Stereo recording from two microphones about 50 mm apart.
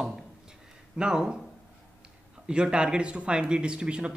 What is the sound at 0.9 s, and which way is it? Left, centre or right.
Speech, centre.